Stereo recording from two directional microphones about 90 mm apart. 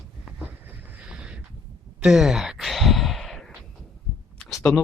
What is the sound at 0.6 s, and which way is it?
Boat, 15° right (ahead or behind).